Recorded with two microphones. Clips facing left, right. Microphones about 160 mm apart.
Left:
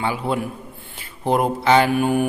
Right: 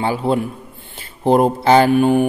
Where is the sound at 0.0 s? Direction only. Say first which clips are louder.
Right 5 dB; 30° right (ahead or behind).